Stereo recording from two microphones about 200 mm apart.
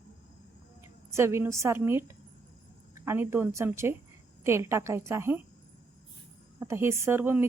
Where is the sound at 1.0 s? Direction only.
15° right (ahead or behind).